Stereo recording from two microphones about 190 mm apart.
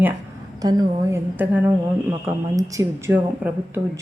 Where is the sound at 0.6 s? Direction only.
20° right (ahead or behind).